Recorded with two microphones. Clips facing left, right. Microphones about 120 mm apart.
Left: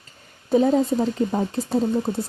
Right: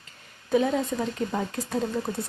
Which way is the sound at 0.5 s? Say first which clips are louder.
Left 6 dB; 35° left (ahead or behind).